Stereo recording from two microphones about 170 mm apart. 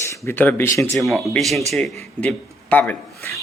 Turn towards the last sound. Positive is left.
turn(degrees=15)  # may be behind; listen again after turning